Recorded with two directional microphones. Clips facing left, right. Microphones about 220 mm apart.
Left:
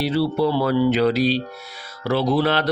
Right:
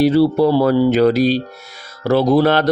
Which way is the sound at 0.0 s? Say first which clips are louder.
Right 7 dB; 45° right (ahead or behind).